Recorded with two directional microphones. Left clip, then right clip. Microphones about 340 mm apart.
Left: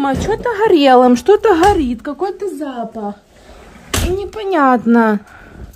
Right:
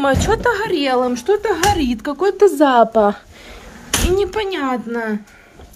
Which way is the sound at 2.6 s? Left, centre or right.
Centre.